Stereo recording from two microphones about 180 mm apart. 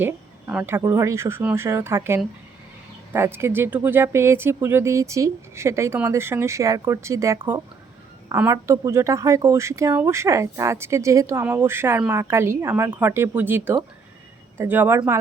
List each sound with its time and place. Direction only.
0.0 s speech: 10° right (ahead or behind)